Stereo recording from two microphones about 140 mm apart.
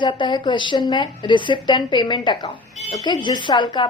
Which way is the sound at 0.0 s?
35° left (ahead or behind).